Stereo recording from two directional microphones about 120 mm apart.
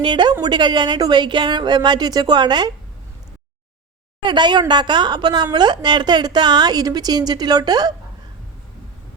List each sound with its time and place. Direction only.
0.0 s a woman's voice: 40° right (ahead or behind)
4.2 s a woman's voice: 40° right (ahead or behind)